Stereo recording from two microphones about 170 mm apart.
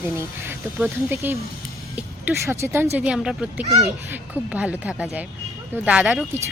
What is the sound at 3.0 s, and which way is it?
Speech, 5° right (ahead or behind).